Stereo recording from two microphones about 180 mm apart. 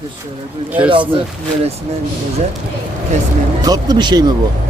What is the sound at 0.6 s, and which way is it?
Speech, 10° right (ahead or behind).